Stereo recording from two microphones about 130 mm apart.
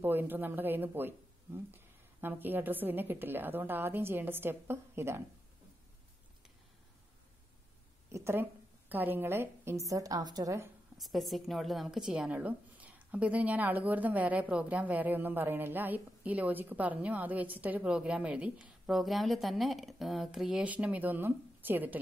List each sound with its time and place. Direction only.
0.0 s a woman's voice: 15° right (ahead or behind)
8.1 s a woman's voice: 20° right (ahead or behind)
11.0 s a woman's voice: centre (ahead or behind)